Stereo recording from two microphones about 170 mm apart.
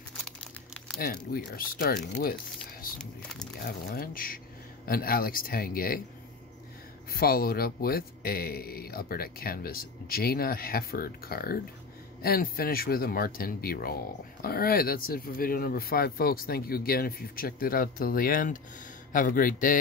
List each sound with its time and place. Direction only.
0.1 s crumpling: 5° left (ahead or behind)
0.9 s speech: 60° left (ahead or behind)
3.0 s speech: 5° left (ahead or behind)
3.6 s speech: 60° left (ahead or behind)
7.1 s speech: 60° left (ahead or behind)